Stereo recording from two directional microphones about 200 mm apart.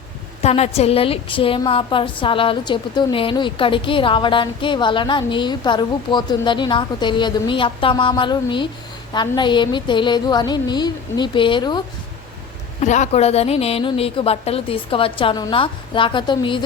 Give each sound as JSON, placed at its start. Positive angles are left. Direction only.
{"t": 0.4, "sound": "a woman's voice", "side_deg": 30}
{"t": 12.8, "sound": "a woman's voice", "side_deg": 35}